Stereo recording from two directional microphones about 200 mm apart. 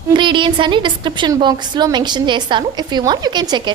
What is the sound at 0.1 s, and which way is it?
A woman's voice, 25° right (ahead or behind).